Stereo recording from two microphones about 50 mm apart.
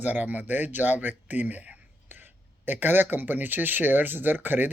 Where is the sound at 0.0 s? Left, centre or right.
Right.